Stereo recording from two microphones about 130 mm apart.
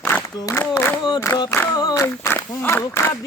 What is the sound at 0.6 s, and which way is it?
Speech, 15° left (ahead or behind).